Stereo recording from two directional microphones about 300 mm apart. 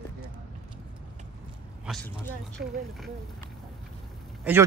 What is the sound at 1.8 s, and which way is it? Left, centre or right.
Speech, centre.